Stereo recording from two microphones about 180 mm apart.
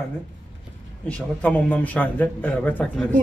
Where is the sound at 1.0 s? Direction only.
5° left (ahead or behind).